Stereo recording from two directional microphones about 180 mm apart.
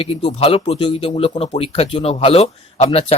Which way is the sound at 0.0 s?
30° left (ahead or behind).